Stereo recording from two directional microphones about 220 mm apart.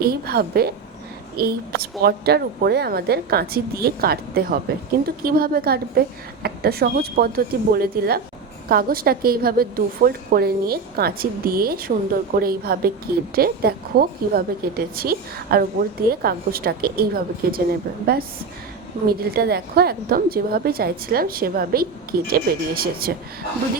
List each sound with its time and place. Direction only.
0.0 s a woman's voice: 45° right (ahead or behind)